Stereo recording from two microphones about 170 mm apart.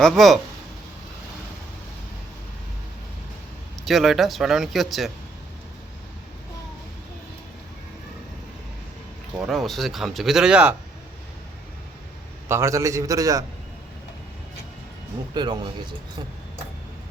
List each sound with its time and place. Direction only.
0.0 s speech: centre (ahead or behind)
3.8 s speech: centre (ahead or behind)
9.4 s speech: centre (ahead or behind)
12.5 s a man's voice: 15° right (ahead or behind)
15.4 s a man's voice: 25° right (ahead or behind)